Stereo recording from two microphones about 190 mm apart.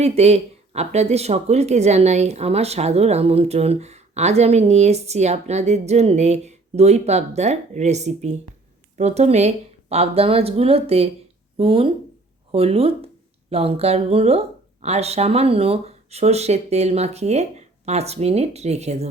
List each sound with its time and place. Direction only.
0.0 s speech: 35° right (ahead or behind)